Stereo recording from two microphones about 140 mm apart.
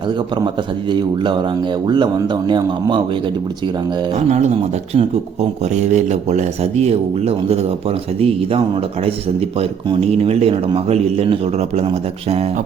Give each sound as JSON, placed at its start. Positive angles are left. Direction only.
{"t": 0.9, "sound": "speech", "side_deg": -35}
{"t": 2.5, "sound": "speech", "side_deg": -30}
{"t": 4.3, "sound": "speech", "side_deg": -55}